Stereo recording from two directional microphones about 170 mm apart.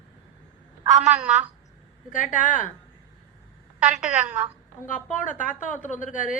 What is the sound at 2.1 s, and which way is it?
Speech, 50° left (ahead or behind).